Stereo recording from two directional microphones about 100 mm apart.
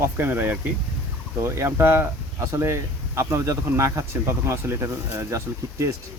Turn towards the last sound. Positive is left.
turn(degrees=-30)  # may be behind; listen again after turning